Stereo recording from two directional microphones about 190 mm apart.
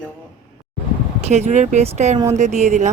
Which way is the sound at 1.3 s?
40° right (ahead or behind).